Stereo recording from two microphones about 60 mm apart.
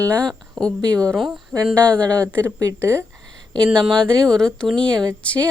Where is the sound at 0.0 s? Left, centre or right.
Left.